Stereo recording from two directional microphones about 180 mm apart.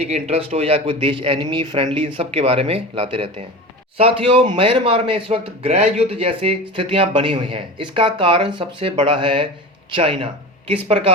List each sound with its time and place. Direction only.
0.0 s a man's voice: 35° right (ahead or behind)